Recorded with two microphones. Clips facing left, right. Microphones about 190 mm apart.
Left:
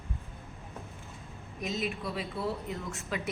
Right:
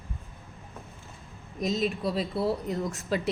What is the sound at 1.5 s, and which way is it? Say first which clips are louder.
A woman's voice: right 6 dB; 35° right (ahead or behind).